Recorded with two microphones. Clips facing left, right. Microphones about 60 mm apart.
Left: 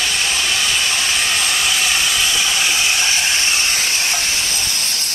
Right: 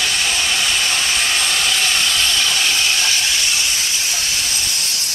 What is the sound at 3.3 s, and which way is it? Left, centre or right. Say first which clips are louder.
Steam: left 2 dB; left.